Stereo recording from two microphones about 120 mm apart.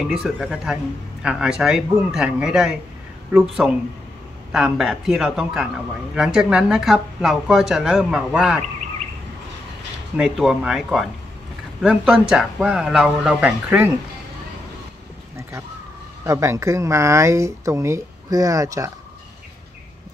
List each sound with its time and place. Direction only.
0.0 s speech: 5° right (ahead or behind)
10.1 s speech: 5° right (ahead or behind)
16.3 s speech: 25° right (ahead or behind)